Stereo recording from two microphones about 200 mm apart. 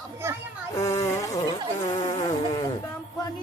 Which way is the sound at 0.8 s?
15° left (ahead or behind).